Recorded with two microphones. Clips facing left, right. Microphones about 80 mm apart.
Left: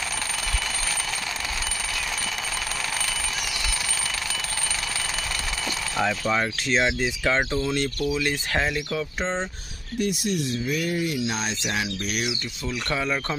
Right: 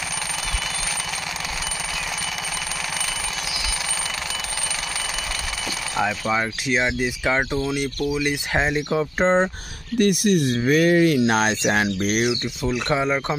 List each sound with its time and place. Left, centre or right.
6.0 s speech: centre; by 9.0 s right
9.2 s speech: right
9.9 s speech: right
11.1 s speech: right
11.6 s speech: right